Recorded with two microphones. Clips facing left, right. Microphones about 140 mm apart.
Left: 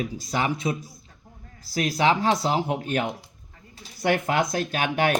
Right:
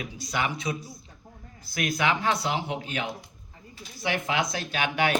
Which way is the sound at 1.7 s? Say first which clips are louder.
Left 5 dB; 35° left (ahead or behind).